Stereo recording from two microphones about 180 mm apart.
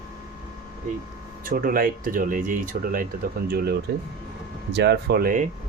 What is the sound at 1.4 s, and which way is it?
Speech, 50° right (ahead or behind).